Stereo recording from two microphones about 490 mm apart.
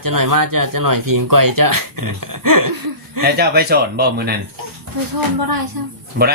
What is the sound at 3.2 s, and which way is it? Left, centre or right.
Speech, centre.